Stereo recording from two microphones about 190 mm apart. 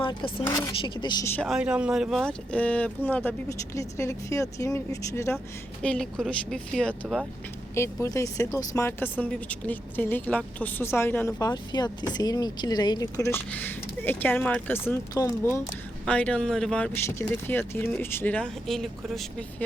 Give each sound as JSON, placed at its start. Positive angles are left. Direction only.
{"t": 0.0, "sound": "speech", "side_deg": 25}
{"t": 1.4, "sound": "speech", "side_deg": 0}
{"t": 8.0, "sound": "speech", "side_deg": 15}